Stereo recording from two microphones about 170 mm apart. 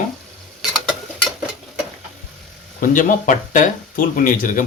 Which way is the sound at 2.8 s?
50° left (ahead or behind).